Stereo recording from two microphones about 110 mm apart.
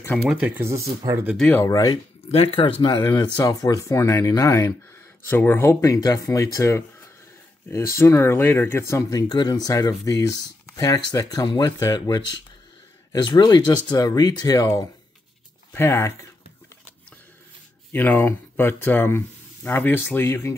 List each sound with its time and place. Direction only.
0.1 s speech: centre (ahead or behind)
0.6 s speech: 25° right (ahead or behind)
1.7 s speech: 35° left (ahead or behind)
2.3 s speech: 55° left (ahead or behind)
3.1 s speech: 35° left (ahead or behind)
9.3 s speech: 40° left (ahead or behind)
15.7 s speech: 20° left (ahead or behind)
17.9 s speech: 15° left (ahead or behind)